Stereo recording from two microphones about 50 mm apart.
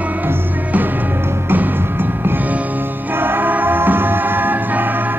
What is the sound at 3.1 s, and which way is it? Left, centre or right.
Music, right.